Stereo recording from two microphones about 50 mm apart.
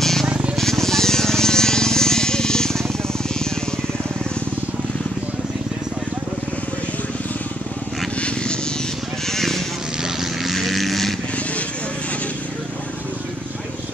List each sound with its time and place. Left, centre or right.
0.0 s vehicle: centre
0.3 s vehicle: right
0.6 s vehicle: centre
9.3 s a sound: centre
10.0 s vehicle: centre